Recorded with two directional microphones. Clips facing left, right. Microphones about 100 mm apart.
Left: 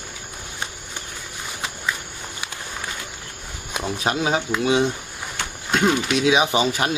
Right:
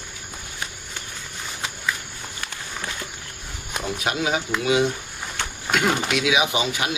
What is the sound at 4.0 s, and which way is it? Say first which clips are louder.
Speech: left 3 dB; 30° left (ahead or behind).